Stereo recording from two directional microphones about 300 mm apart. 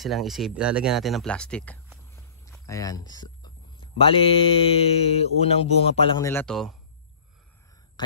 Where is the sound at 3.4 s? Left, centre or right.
Centre.